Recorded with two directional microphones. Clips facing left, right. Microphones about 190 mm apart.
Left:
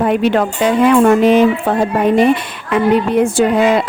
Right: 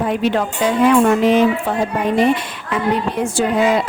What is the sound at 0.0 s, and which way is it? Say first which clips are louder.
A woman's voice: left 4 dB; 65° left (ahead or behind).